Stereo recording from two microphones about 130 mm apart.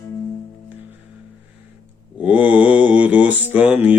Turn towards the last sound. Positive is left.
turn(degrees=-15)  # may be behind; listen again after turning